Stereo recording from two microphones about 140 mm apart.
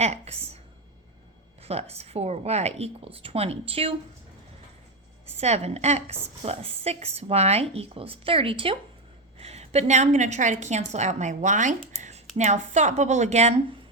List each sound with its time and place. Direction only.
0.0 s a woman's voice: 50° right (ahead or behind)
1.6 s a woman's voice: 45° right (ahead or behind)
5.3 s a woman's voice: 50° right (ahead or behind)
9.4 s a woman's voice: 50° right (ahead or behind)
11.9 s a sound: 55° right (ahead or behind)
12.4 s a woman's voice: 55° right (ahead or behind)